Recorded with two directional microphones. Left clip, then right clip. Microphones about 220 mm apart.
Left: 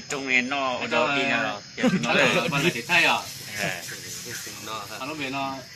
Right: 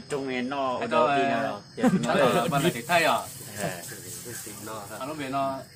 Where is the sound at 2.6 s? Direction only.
10° right (ahead or behind).